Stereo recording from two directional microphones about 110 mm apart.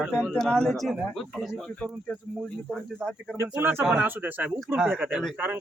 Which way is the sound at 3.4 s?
20° right (ahead or behind).